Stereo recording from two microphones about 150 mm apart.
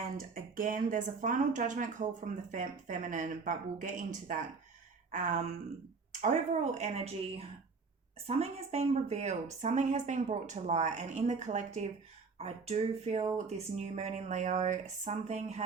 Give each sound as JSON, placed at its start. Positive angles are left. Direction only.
{"t": 0.2, "sound": "a woman's voice", "side_deg": -60}